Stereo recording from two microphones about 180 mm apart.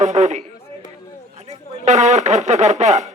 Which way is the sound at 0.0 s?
40° right (ahead or behind).